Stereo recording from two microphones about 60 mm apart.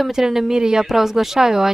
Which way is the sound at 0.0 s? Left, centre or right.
Centre.